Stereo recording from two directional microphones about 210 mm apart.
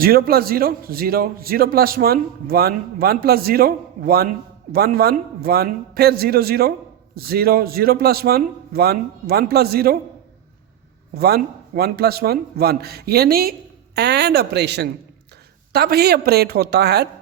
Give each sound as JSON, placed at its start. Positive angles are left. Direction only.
{"t": 0.0, "sound": "a man's voice", "side_deg": -45}
{"t": 11.1, "sound": "a man's voice", "side_deg": -45}